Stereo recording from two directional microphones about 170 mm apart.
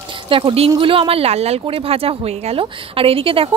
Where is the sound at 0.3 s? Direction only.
30° right (ahead or behind).